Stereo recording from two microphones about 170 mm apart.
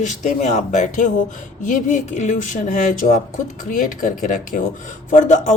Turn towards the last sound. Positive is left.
turn(degrees=45)  # may be behind; listen again after turning